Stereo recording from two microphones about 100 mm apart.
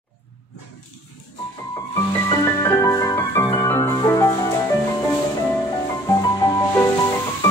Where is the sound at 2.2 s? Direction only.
30° left (ahead or behind).